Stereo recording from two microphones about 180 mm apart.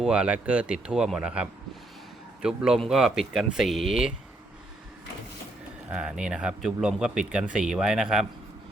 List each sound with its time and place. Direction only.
0.0 s speech: 5° right (ahead or behind)
5.9 s speech: 5° right (ahead or behind)